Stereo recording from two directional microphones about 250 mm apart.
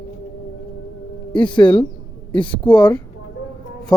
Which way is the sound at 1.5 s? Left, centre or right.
Centre.